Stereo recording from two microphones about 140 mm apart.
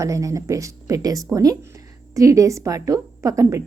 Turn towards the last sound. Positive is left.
turn(degrees=-25)  # may be behind; listen again after turning